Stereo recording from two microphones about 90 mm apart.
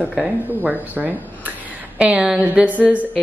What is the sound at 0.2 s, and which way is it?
A woman's voice, 20° right (ahead or behind).